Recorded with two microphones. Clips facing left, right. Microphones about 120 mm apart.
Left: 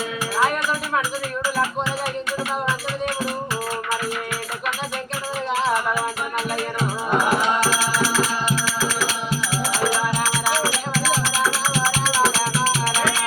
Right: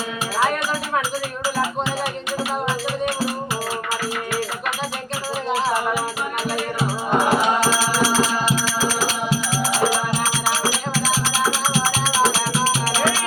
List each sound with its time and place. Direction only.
6.8 s music: 35° right (ahead or behind)